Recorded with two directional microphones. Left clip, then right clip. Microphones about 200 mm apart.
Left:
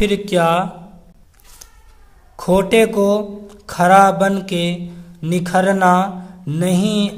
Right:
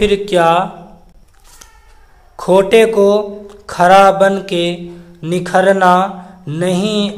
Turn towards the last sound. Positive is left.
turn(degrees=20)  # may be behind; listen again after turning